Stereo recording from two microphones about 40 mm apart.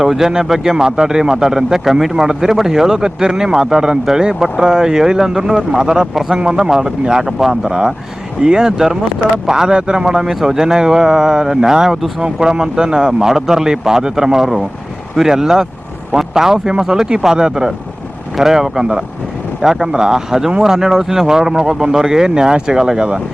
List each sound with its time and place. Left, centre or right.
0.0 s speech: centre